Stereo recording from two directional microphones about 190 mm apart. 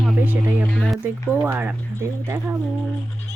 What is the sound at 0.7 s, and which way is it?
Speech, 5° left (ahead or behind).